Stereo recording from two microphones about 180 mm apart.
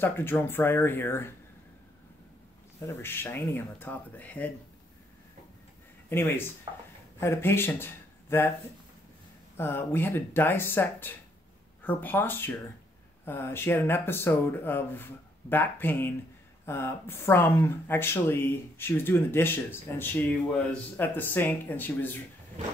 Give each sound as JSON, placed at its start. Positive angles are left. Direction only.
{"t": 0.0, "sound": "speech", "side_deg": 10}
{"t": 2.9, "sound": "speech", "side_deg": 15}
{"t": 6.0, "sound": "speech", "side_deg": 10}
{"t": 9.6, "sound": "speech", "side_deg": 10}